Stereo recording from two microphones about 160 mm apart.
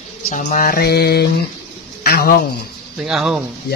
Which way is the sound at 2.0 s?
70° left (ahead or behind).